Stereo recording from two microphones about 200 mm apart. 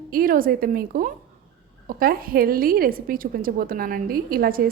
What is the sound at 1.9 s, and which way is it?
A woman's voice, 45° right (ahead or behind).